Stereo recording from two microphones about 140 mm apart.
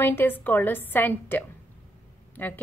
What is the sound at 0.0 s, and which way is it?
A woman's voice, 15° left (ahead or behind).